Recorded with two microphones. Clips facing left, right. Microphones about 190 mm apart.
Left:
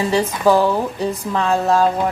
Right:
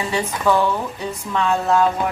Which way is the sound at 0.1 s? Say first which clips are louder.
Left 3 dB; 35° left (ahead or behind).